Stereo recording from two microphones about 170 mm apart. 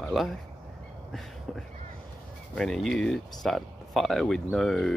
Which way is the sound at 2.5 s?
5° left (ahead or behind).